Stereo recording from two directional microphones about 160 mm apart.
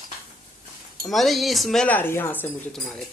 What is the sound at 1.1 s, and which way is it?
Speech, centre (ahead or behind).